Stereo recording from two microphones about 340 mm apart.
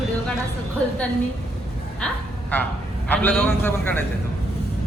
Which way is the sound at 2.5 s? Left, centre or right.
Centre.